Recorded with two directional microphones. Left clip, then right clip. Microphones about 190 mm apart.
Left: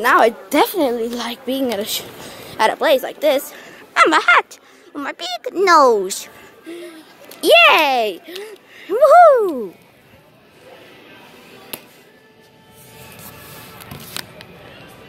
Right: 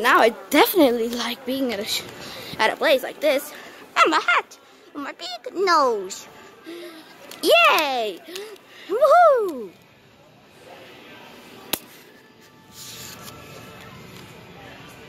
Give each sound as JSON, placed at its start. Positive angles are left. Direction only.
{"t": 0.0, "sound": "a woman's voice", "side_deg": 0}
{"t": 1.5, "sound": "a woman's voice", "side_deg": 10}
{"t": 3.9, "sound": "speech", "side_deg": 25}
{"t": 7.3, "sound": "a child's voice", "side_deg": 5}
{"t": 7.6, "sound": "a child's voice", "side_deg": 20}
{"t": 8.4, "sound": "speech", "side_deg": 15}